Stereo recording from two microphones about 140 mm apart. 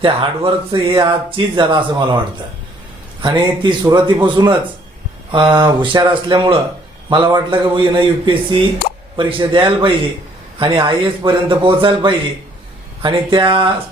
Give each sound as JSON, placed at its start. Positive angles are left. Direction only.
{"t": 0.0, "sound": "a man's voice", "side_deg": -40}